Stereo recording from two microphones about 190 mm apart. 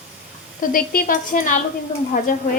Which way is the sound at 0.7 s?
45° left (ahead or behind).